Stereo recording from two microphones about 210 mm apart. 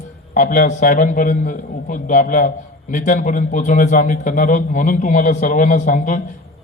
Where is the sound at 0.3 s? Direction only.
35° left (ahead or behind).